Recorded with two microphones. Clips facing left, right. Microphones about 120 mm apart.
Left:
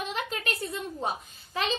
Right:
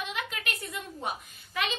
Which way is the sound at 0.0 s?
35° left (ahead or behind).